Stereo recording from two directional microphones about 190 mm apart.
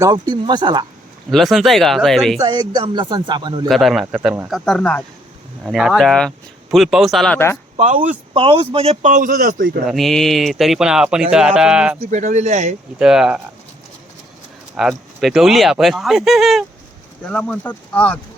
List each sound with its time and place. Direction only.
0.0 s speech: 20° right (ahead or behind)
1.3 s speech: centre (ahead or behind)
2.4 s speech: 20° right (ahead or behind)
3.7 s speech: centre (ahead or behind)
7.3 s speech: 10° left (ahead or behind)
7.8 s speech: 40° right (ahead or behind)
8.3 s a man's voice: 30° right (ahead or behind); by 9.8 s 45° right (ahead or behind)
9.8 s speech: centre (ahead or behind)
12.1 s a man's voice: 40° right (ahead or behind)
13.0 s speech: 5° right (ahead or behind)
14.8 s speech: centre (ahead or behind)